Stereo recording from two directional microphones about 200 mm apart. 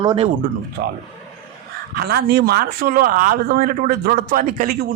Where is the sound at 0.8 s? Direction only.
65° right (ahead or behind).